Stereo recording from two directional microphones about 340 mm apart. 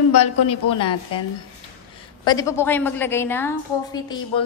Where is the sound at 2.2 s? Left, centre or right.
Centre.